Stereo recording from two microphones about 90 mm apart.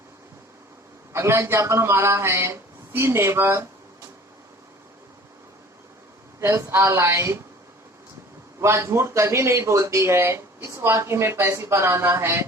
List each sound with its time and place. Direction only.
1.1 s a man's voice: 30° right (ahead or behind)
6.5 s speech: 30° right (ahead or behind)
8.6 s speech: 30° right (ahead or behind)